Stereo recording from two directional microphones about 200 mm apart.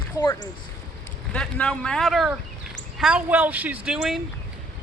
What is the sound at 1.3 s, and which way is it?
Speech, 5° left (ahead or behind).